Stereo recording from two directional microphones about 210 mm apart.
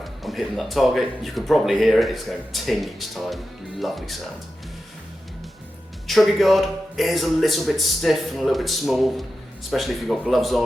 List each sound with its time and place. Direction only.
0.0 s speech: centre (ahead or behind)
6.1 s speech: centre (ahead or behind)